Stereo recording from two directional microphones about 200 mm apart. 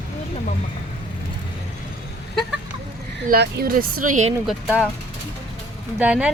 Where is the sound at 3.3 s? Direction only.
50° right (ahead or behind).